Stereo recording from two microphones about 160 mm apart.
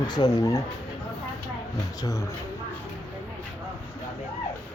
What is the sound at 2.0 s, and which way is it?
Speech, 20° left (ahead or behind).